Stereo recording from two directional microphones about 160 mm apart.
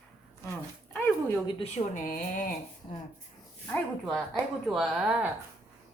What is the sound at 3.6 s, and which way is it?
Speech, 5° left (ahead or behind).